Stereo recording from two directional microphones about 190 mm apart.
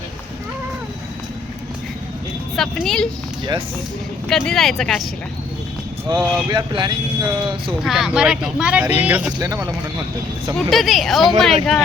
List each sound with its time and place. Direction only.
2.6 s speech: centre (ahead or behind)
4.3 s speech: centre (ahead or behind)
6.1 s speech: 20° right (ahead or behind)
7.9 s speech: 5° right (ahead or behind)
10.7 s speech: centre (ahead or behind)